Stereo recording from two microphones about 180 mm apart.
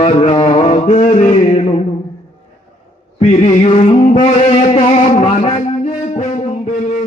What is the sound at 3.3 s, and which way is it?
Mantra, 35° left (ahead or behind).